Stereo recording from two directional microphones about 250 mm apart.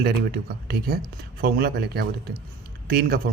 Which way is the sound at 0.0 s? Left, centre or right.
Right.